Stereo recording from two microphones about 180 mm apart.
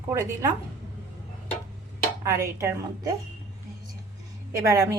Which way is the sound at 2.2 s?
15° right (ahead or behind).